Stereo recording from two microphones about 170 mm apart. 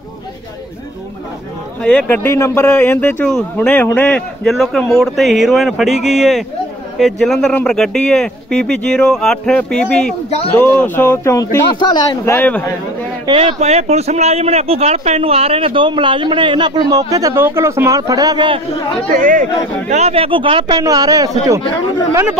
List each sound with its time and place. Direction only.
1.8 s speech: 5° left (ahead or behind); by 12.2 s 25° left (ahead or behind)
12.3 s speech: 10° left (ahead or behind)
13.3 s speech: 35° right (ahead or behind)
19.1 s speech: 50° right (ahead or behind)
19.9 s speech: 40° right (ahead or behind); by 21.3 s 20° right (ahead or behind)